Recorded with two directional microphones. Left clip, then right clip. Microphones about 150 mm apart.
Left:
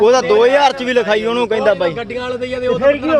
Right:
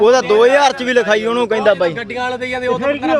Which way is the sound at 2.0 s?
85° right.